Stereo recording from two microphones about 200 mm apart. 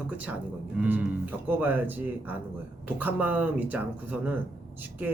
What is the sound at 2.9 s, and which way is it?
Speech, 10° right (ahead or behind).